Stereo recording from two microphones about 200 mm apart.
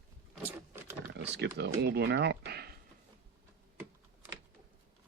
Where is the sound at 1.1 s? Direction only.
55° right (ahead or behind).